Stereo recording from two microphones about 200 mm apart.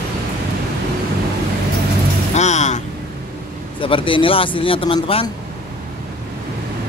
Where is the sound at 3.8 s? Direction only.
25° left (ahead or behind).